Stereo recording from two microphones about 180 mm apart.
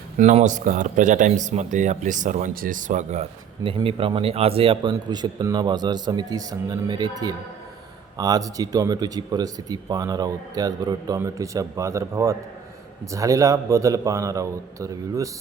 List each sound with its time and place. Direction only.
0.2 s speech: 40° right (ahead or behind); by 15.3 s 15° right (ahead or behind)